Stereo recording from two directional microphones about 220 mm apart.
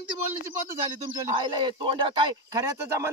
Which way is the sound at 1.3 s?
20° right (ahead or behind).